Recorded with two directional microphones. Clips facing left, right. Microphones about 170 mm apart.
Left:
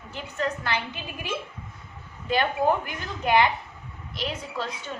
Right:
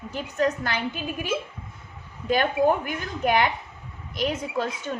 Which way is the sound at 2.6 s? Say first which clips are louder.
Right 3 dB; 90° right.